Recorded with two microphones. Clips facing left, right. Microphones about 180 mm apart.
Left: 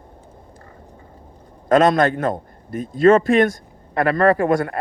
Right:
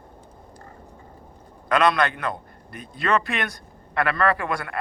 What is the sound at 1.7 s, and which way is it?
A man's voice, 45° left (ahead or behind).